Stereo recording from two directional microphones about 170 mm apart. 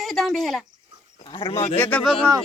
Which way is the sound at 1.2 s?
30° left (ahead or behind).